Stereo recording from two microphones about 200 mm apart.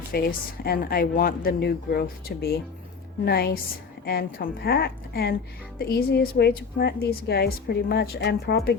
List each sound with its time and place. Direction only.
0.1 s a woman's voice: 50° left (ahead or behind)